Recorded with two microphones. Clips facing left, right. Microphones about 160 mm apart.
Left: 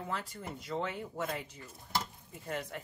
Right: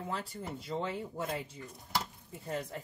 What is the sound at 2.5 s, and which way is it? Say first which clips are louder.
Speech: right 1 dB; 30° right (ahead or behind).